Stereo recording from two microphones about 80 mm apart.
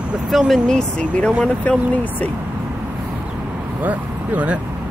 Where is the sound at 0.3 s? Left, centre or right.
Centre.